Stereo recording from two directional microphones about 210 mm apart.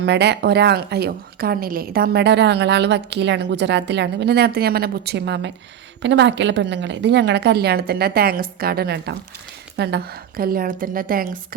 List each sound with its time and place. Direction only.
0.0 s a woman's voice: 55° right (ahead or behind)